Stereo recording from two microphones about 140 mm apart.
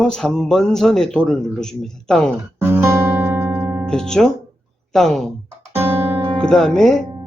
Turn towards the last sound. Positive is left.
turn(degrees=5)  # may be behind; listen again after turning